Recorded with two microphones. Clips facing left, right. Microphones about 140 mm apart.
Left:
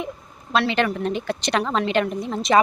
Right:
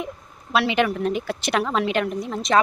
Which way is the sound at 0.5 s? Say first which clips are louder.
Even; 10° right (ahead or behind).